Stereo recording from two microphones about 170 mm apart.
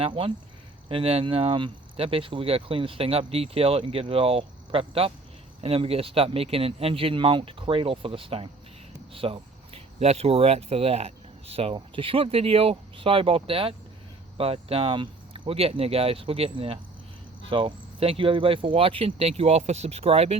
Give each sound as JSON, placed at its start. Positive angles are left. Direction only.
{"t": 0.0, "sound": "speech", "side_deg": -30}